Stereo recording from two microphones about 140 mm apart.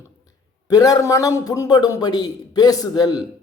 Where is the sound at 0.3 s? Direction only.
25° left (ahead or behind).